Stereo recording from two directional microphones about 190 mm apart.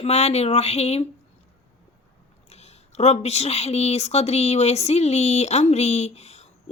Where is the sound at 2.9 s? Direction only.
35° left (ahead or behind).